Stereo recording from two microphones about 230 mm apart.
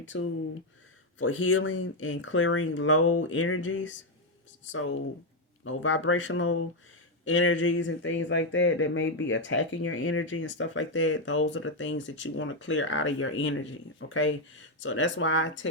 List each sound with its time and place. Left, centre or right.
0.1 s speech: left